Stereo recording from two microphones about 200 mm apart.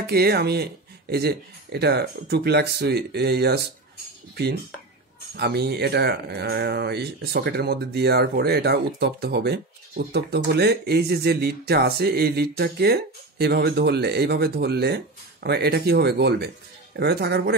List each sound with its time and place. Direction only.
0.0 s speech: 50° right (ahead or behind)
5.3 s speech: 55° right (ahead or behind)